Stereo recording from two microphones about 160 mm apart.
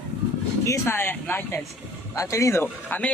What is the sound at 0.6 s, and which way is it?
Speech, 15° left (ahead or behind).